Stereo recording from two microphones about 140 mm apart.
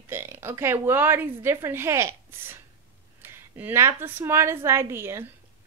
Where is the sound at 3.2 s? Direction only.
15° right (ahead or behind).